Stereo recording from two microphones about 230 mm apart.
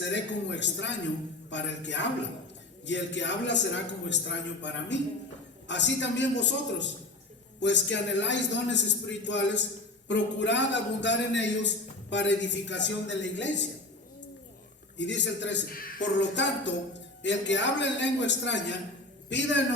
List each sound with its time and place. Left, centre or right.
0.0 s a man's voice: left
14.9 s a man's voice: left